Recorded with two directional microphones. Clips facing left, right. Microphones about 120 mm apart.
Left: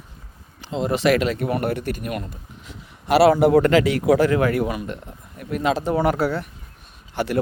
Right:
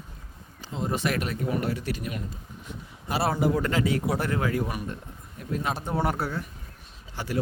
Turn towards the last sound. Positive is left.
turn(degrees=70)  # may be behind; listen again after turning